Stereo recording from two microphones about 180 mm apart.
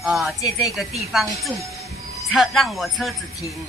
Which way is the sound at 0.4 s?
20° left (ahead or behind).